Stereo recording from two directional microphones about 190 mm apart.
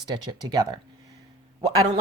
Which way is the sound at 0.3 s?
20° right (ahead or behind).